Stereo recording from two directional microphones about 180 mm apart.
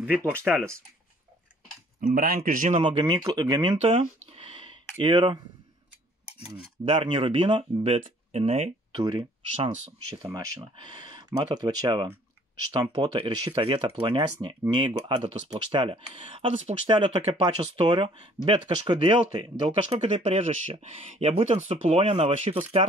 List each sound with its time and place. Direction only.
0.0 s speech: 10° right (ahead or behind)
2.0 s speech: 50° right (ahead or behind)
2.8 s speech: 30° right (ahead or behind)
3.7 s a sound: 35° right (ahead or behind)
6.5 s speech: 30° right (ahead or behind)
8.9 s speech: 20° right (ahead or behind)